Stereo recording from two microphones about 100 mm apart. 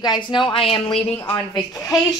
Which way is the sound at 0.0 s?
50° left (ahead or behind).